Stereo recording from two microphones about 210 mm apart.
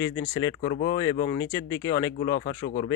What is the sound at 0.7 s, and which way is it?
Speech, 55° left (ahead or behind).